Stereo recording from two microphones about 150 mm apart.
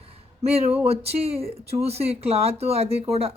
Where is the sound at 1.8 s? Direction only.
45° right (ahead or behind).